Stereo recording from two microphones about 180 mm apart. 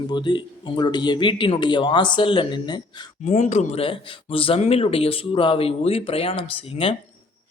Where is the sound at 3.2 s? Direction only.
35° left (ahead or behind).